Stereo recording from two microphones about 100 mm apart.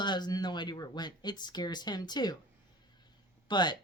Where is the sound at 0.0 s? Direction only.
45° left (ahead or behind).